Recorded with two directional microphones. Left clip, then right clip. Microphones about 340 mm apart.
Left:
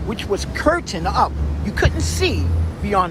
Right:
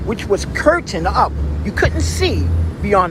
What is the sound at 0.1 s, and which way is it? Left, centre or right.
Speech, centre.